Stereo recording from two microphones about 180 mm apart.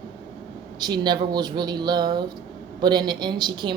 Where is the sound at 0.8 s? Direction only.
25° right (ahead or behind).